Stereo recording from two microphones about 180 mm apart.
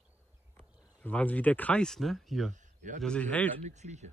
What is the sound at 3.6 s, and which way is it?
Speech, 40° right (ahead or behind).